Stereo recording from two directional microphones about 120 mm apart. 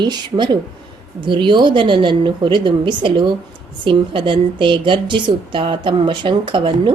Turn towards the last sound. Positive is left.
turn(degrees=-45)  # may be behind; listen again after turning